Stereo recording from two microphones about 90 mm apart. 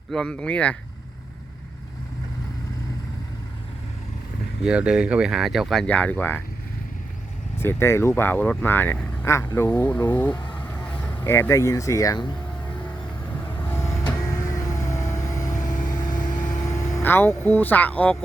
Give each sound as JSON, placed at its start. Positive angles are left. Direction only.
{"t": 0.1, "sound": "speech", "side_deg": 10}
{"t": 4.6, "sound": "speech", "side_deg": -10}
{"t": 5.8, "sound": "speech", "side_deg": 15}
{"t": 7.6, "sound": "speech", "side_deg": 30}
{"t": 9.6, "sound": "a sound", "side_deg": 15}
{"t": 11.3, "sound": "speech", "side_deg": 30}
{"t": 12.8, "sound": "vehicle", "side_deg": 15}
{"t": 14.5, "sound": "vehicle", "side_deg": 40}
{"t": 17.0, "sound": "speech", "side_deg": 25}